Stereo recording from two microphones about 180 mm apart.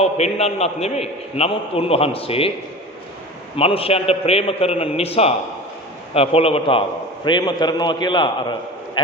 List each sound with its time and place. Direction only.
0.0 s a man's voice: 35° left (ahead or behind)
3.6 s a man's voice: 30° left (ahead or behind)